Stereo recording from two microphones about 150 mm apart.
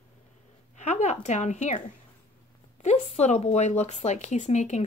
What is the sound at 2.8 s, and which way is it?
Speech, 50° left (ahead or behind).